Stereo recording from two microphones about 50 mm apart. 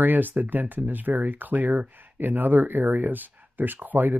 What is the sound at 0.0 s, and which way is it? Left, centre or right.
Speech, right.